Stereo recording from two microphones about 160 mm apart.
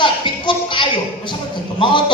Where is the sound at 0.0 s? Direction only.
30° left (ahead or behind).